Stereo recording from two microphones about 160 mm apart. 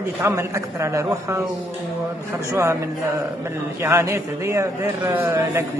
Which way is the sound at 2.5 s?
20° right (ahead or behind).